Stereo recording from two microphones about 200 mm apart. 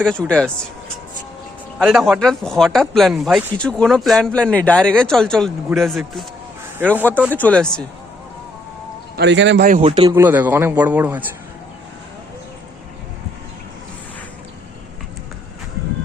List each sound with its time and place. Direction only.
0.0 s speech: 5° left (ahead or behind)
1.8 s speech: centre (ahead or behind)
7.3 s speech: 10° left (ahead or behind)
9.1 s speech: 60° right (ahead or behind)
9.6 s a man's voice: 35° right (ahead or behind)
10.2 s a man's voice: 10° right (ahead or behind)